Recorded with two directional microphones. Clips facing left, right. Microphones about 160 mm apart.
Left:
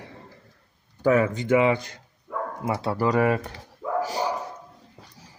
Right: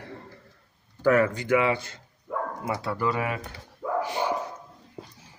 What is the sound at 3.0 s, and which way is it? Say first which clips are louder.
Speech: left 9 dB; 40° left (ahead or behind).